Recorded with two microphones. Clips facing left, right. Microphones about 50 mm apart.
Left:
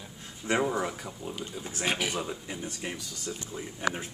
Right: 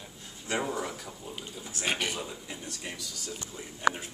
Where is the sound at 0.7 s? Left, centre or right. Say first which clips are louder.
Left 3 dB; centre.